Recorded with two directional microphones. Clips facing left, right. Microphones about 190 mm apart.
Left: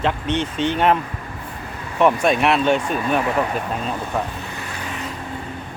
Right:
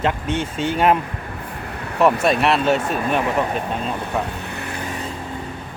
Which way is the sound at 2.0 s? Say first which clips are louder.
Even; centre (ahead or behind).